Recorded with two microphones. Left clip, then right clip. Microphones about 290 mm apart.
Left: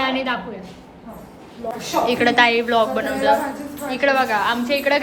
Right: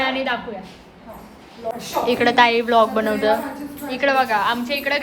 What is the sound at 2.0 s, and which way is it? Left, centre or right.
A woman's voice, centre.